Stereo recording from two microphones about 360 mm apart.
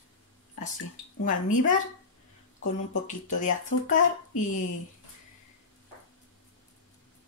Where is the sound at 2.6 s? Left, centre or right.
Centre.